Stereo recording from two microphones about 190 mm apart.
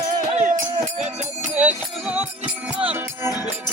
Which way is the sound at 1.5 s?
10° right (ahead or behind).